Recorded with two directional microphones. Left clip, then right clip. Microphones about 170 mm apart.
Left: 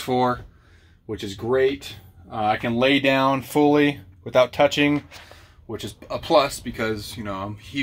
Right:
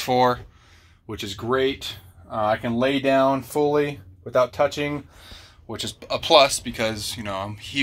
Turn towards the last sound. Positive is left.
turn(degrees=15)  # may be behind; listen again after turning